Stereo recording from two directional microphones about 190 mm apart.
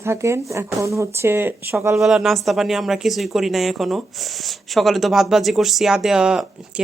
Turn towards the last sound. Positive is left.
turn(degrees=-5)  # may be behind; listen again after turning